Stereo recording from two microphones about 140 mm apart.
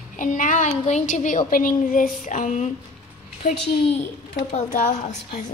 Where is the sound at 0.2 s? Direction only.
65° left (ahead or behind); by 4.7 s 50° left (ahead or behind).